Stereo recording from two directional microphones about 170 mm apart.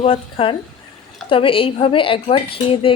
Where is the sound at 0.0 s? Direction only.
35° left (ahead or behind).